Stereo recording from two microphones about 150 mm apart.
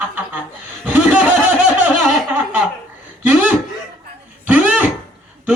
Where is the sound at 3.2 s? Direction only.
10° right (ahead or behind).